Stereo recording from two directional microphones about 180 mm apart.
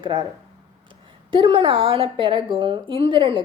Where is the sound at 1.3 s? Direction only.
30° right (ahead or behind).